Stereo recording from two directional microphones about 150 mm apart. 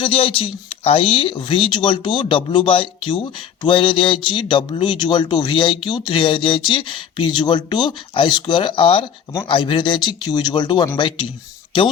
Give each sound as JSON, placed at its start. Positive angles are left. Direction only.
{"t": 0.0, "sound": "speech", "side_deg": 35}